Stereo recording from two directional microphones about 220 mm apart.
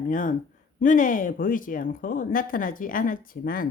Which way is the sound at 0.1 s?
35° left (ahead or behind).